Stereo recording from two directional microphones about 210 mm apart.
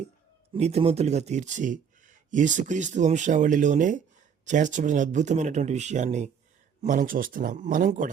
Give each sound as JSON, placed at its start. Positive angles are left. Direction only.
{"t": 0.5, "sound": "a man's voice", "side_deg": -30}